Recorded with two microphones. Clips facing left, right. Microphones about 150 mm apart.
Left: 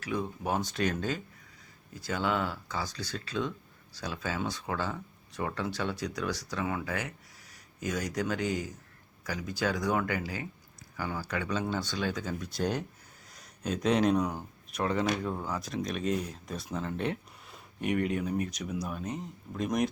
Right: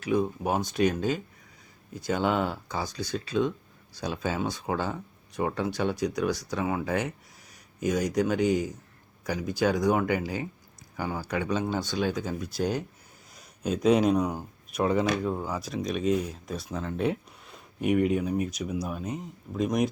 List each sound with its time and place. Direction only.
0.0 s speech: 15° right (ahead or behind)